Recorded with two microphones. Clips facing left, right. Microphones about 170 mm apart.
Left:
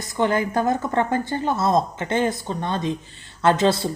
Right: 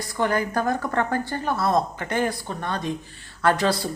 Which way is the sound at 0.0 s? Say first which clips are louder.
Left 2 dB; 20° left (ahead or behind).